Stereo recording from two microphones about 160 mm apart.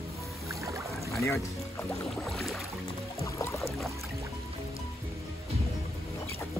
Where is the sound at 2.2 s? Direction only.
Centre (ahead or behind).